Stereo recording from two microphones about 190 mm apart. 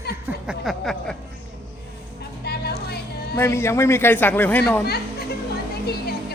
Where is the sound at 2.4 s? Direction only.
60° left (ahead or behind).